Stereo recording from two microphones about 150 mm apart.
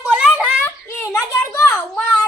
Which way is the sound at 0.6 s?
20° left (ahead or behind).